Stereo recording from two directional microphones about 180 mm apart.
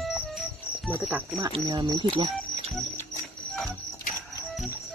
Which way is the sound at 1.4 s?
25° right (ahead or behind).